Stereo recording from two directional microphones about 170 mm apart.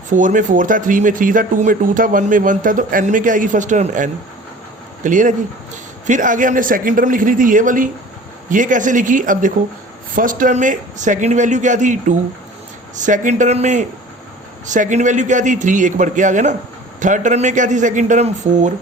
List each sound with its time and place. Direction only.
0.1 s speech: 50° right (ahead or behind)